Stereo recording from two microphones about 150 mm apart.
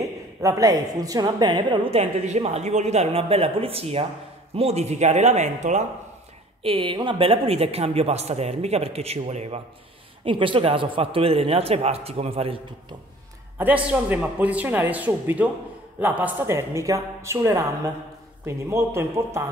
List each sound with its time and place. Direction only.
0.4 s a woman's voice: 25° right (ahead or behind)
2.0 s speech: 45° right (ahead or behind)
6.6 s a man's voice: 35° right (ahead or behind)
13.6 s a man's voice: 10° right (ahead or behind)